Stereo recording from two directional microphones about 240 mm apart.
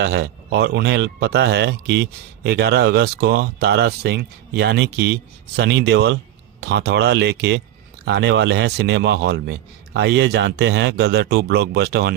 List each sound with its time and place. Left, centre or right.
0.0 s speech: right